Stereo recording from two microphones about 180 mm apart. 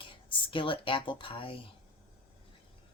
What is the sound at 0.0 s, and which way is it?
Speech, 30° left (ahead or behind).